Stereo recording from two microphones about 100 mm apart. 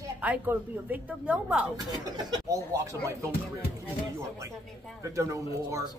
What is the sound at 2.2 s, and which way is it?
Speech, 40° right (ahead or behind).